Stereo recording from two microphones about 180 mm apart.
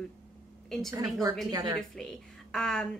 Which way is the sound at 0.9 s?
20° right (ahead or behind).